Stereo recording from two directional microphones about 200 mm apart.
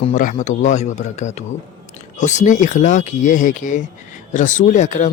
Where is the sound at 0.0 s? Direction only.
40° left (ahead or behind).